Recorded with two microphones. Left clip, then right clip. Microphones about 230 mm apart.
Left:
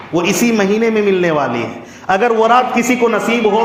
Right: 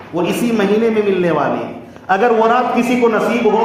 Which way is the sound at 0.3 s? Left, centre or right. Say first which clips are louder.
Left 1 dB; left.